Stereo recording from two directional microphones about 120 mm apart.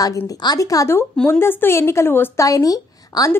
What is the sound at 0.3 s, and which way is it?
Speech, 30° left (ahead or behind).